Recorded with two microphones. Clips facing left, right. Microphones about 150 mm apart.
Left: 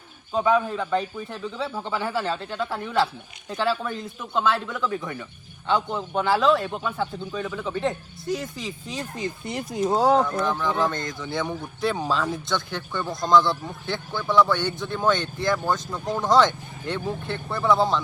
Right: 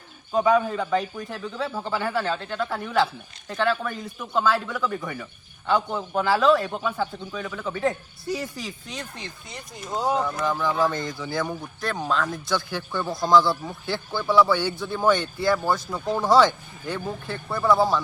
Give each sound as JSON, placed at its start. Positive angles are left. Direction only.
{"t": 0.3, "sound": "speech", "side_deg": 0}
{"t": 8.9, "sound": "speech", "side_deg": 35}
{"t": 9.6, "sound": "speech", "side_deg": 90}
{"t": 10.2, "sound": "speech", "side_deg": -5}
{"t": 12.5, "sound": "speech", "side_deg": -5}